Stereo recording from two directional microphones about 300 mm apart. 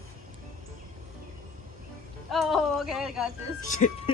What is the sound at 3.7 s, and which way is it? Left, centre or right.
Speech, left.